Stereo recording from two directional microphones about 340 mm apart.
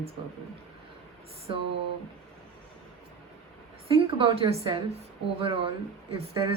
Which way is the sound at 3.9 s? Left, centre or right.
Centre.